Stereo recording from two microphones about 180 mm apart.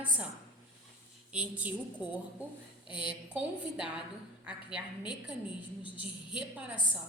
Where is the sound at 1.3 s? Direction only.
5° right (ahead or behind).